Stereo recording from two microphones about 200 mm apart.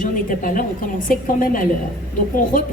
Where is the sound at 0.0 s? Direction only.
45° left (ahead or behind).